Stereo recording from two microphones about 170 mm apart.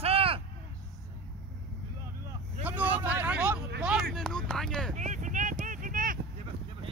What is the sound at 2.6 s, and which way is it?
Vehicle, 10° right (ahead or behind).